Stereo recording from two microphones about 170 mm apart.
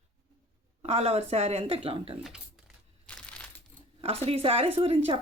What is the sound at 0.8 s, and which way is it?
Speech, 35° right (ahead or behind).